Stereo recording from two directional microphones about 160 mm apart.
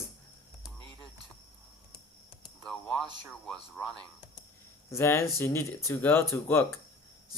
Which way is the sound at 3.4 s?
5° left (ahead or behind).